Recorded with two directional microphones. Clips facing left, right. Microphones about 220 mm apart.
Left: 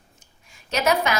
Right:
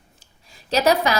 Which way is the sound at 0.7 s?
35° right (ahead or behind).